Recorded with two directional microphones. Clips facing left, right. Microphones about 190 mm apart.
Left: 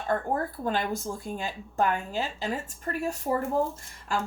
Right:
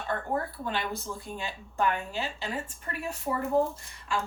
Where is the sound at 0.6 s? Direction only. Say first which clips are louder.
Left 4 dB; 45° left (ahead or behind).